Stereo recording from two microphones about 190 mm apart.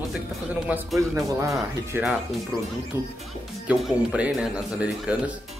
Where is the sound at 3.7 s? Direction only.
5° right (ahead or behind).